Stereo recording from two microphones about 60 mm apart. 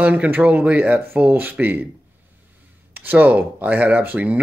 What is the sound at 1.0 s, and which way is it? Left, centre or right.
Speech, right.